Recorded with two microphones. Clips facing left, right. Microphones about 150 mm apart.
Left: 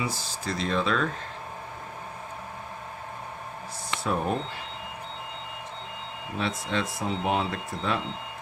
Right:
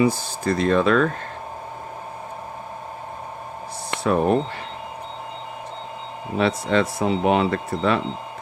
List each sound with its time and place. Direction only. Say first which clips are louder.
0.0 s speech: right 12 dB; 55° right (ahead or behind)
3.9 s speech: right 8 dB; 65° right (ahead or behind)
6.3 s speech: right 9 dB; 75° right (ahead or behind)